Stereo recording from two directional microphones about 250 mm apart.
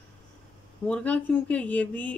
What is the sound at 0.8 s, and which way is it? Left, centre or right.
Speech, centre.